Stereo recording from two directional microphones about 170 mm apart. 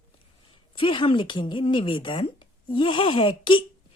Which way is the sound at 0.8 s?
30° left (ahead or behind).